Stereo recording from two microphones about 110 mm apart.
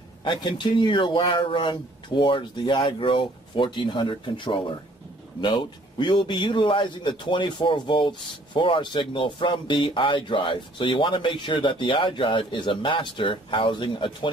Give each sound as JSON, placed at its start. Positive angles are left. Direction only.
{"t": 0.2, "sound": "a man's voice", "side_deg": 45}